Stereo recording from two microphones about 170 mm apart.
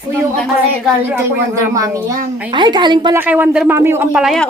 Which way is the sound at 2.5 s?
25° right (ahead or behind).